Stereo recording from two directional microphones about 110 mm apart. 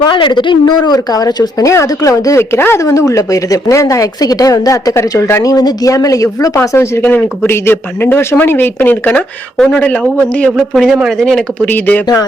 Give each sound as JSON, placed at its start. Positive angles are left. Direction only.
{"t": 0.0, "sound": "speech", "side_deg": 45}
{"t": 11.7, "sound": "speech", "side_deg": 15}